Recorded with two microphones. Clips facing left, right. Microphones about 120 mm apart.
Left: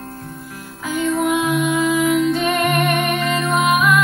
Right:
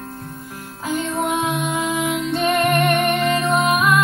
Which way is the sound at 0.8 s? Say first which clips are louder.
Left 3 dB; 30° right (ahead or behind).